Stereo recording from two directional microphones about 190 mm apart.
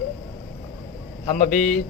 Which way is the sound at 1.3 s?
45° left (ahead or behind).